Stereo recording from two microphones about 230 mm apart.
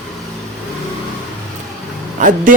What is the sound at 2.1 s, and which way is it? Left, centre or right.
Speech, right.